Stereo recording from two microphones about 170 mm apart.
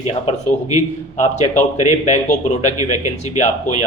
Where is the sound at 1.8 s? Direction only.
45° left (ahead or behind).